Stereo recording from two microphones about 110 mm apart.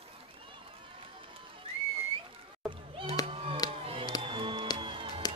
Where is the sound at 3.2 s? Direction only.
35° left (ahead or behind).